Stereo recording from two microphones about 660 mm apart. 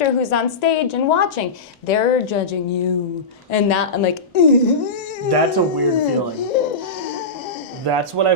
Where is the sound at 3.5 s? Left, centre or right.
Left.